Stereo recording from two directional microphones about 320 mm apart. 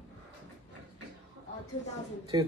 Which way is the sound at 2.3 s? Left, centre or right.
Centre.